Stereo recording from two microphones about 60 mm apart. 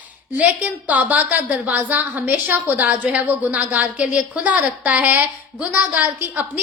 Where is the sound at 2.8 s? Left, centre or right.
Right.